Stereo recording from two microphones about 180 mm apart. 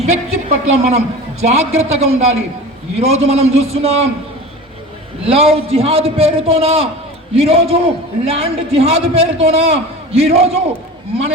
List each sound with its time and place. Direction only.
0.0 s a woman's voice: 40° right (ahead or behind)
5.2 s a woman's voice: 35° right (ahead or behind)